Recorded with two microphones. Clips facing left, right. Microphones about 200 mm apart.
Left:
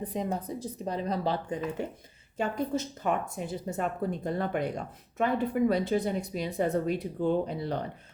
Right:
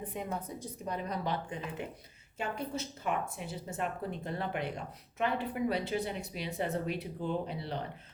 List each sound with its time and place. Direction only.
0.0 s speech: 35° left (ahead or behind)